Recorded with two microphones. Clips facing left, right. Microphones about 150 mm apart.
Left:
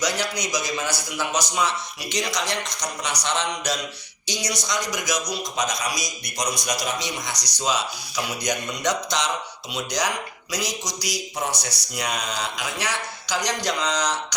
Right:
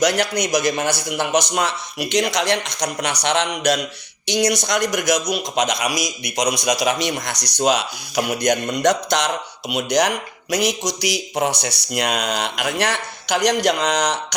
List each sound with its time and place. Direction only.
0.0 s speech: 60° right (ahead or behind)
5.5 s a man's voice: 80° right; by 14.3 s 60° right (ahead or behind)